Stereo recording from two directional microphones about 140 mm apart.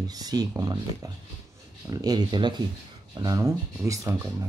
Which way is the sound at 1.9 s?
25° right (ahead or behind).